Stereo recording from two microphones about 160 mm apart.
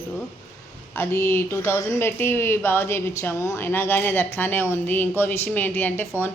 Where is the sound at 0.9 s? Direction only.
15° left (ahead or behind).